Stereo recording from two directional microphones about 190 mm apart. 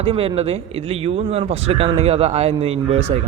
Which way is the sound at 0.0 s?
30° right (ahead or behind).